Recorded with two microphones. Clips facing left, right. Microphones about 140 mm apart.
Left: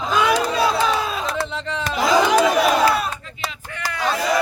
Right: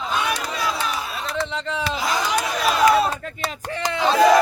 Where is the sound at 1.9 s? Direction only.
65° left (ahead or behind).